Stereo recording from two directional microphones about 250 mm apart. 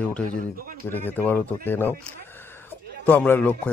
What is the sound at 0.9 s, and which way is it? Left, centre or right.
Speech, centre.